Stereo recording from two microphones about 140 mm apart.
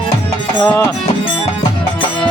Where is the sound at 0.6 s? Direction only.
20° left (ahead or behind).